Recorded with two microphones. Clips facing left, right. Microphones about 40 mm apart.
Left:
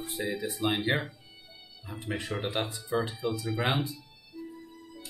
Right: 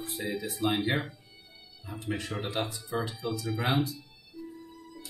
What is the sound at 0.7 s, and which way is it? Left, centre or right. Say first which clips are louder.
Speech: even; centre.